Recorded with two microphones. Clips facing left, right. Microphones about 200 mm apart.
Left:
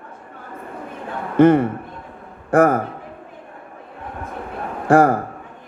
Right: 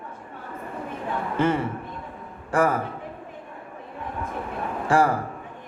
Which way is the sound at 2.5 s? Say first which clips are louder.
Left 7 dB; 60° left (ahead or behind).